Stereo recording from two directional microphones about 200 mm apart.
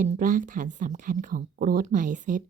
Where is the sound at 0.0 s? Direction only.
40° right (ahead or behind).